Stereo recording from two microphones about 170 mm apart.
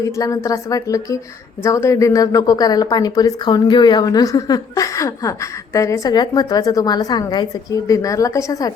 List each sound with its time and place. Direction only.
0.0 s a woman's voice: 20° left (ahead or behind)